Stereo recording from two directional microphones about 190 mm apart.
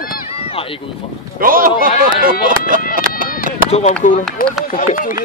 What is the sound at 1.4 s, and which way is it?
Speech, 50° right (ahead or behind).